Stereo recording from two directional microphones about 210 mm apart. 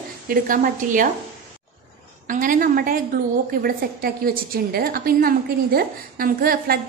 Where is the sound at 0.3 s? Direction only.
40° right (ahead or behind).